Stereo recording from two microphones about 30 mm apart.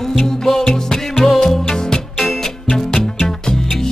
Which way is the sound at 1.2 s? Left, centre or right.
Centre.